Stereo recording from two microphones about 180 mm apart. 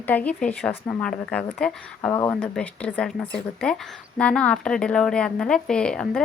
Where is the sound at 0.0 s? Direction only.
10° left (ahead or behind).